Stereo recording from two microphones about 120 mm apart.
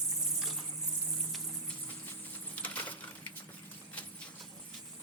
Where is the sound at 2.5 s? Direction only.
15° left (ahead or behind).